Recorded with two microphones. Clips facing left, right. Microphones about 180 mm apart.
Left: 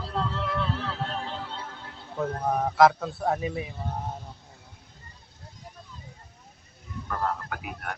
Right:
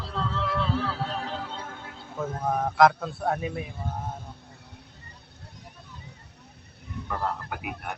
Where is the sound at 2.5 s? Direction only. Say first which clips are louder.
Even; 5° left (ahead or behind).